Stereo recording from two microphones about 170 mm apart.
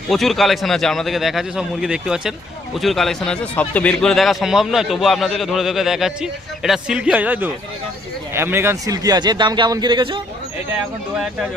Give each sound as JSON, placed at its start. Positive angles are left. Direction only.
{"t": 0.1, "sound": "a man's voice", "side_deg": 0}